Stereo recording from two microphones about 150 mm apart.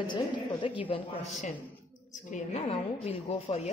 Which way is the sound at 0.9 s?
50° left (ahead or behind).